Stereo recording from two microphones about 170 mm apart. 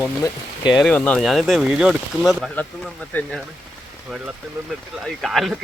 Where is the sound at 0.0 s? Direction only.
20° left (ahead or behind).